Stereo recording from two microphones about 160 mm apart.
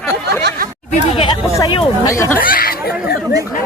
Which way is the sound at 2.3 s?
65° left (ahead or behind).